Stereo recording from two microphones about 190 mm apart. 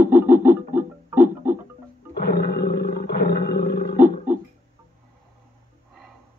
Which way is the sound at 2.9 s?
55° left (ahead or behind).